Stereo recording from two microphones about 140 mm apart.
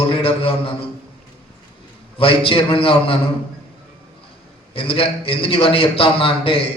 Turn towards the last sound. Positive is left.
turn(degrees=40)  # may be behind; listen again after turning